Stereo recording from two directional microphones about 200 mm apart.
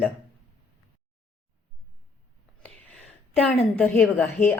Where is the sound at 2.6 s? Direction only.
5° left (ahead or behind).